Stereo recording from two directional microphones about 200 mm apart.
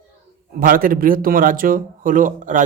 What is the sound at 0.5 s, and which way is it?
Speech, 45° right (ahead or behind).